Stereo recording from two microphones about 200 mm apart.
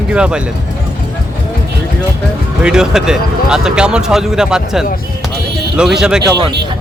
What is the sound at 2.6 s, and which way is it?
Speech, 5° right (ahead or behind).